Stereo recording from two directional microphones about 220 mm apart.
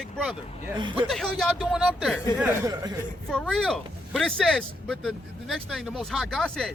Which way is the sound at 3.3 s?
Centre (ahead or behind).